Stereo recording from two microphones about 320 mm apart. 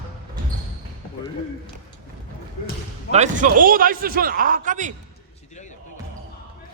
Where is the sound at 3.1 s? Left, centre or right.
Right.